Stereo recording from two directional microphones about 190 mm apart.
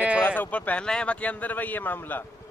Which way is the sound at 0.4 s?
10° left (ahead or behind).